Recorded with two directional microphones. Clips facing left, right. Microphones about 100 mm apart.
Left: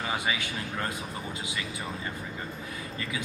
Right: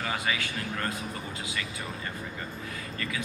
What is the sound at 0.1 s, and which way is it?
Speech, 20° left (ahead or behind).